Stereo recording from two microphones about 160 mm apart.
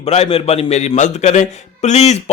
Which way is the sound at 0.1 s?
40° left (ahead or behind).